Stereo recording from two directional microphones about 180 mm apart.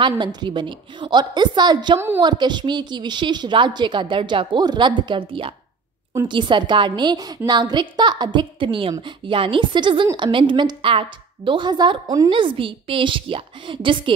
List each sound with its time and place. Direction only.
0.0 s a woman's voice: 25° right (ahead or behind)